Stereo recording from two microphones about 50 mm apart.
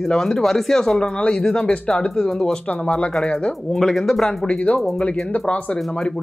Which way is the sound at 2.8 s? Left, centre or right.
Left.